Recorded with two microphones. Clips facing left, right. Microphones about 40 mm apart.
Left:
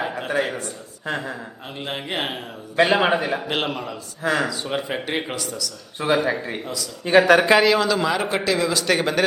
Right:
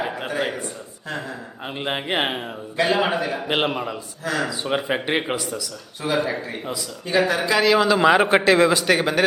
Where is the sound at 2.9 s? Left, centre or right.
Left.